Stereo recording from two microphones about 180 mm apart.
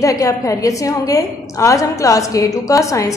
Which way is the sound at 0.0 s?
20° left (ahead or behind).